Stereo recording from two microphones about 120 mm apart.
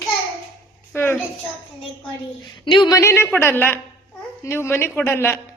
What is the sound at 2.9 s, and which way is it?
Speech, 25° left (ahead or behind).